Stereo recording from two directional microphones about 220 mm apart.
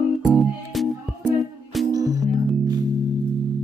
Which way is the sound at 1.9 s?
15° right (ahead or behind).